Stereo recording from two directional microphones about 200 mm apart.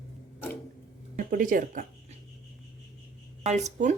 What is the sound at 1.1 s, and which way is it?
Speech, 40° right (ahead or behind).